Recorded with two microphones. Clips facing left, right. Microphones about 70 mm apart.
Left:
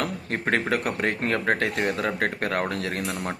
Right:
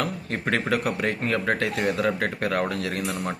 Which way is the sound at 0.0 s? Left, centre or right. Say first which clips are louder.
Even; left.